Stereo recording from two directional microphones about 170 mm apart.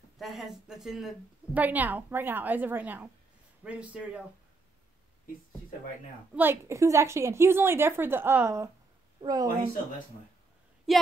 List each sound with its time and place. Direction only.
0.2 s a woman's voice: centre (ahead or behind)
6.3 s a woman's voice: 15° right (ahead or behind)
10.9 s speech: centre (ahead or behind)